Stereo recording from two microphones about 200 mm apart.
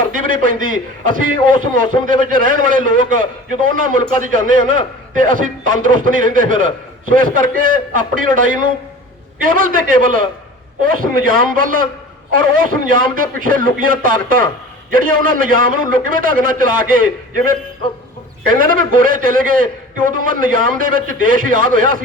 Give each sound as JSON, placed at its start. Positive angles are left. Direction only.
{"t": 0.1, "sound": "a man's voice", "side_deg": -45}